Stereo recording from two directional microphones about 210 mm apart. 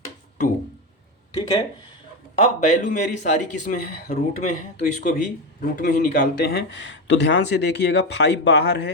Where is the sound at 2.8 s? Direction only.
35° left (ahead or behind).